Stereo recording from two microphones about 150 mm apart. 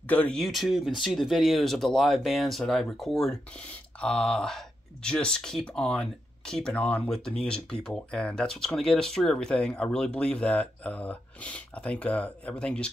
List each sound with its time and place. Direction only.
0.0 s speech: 10° left (ahead or behind)